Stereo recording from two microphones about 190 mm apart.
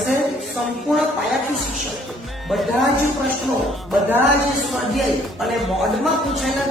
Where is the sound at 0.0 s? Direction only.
Centre (ahead or behind).